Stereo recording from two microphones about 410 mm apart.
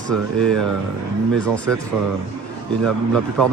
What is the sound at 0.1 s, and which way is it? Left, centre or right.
Speech, right.